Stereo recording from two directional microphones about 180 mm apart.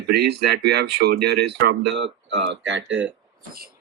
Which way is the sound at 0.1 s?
70° right (ahead or behind).